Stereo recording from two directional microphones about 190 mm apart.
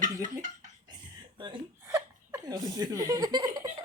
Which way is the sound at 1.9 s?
20° right (ahead or behind).